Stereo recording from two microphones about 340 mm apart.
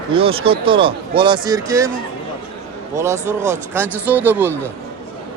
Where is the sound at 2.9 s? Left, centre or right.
Centre.